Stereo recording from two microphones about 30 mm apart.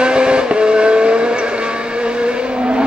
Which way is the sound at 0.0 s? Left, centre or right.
Right.